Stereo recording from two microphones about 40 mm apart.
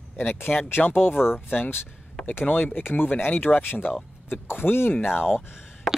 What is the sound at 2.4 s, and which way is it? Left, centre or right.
Speech, left.